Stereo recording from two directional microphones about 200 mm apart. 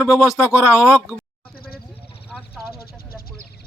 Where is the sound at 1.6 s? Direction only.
50° left (ahead or behind).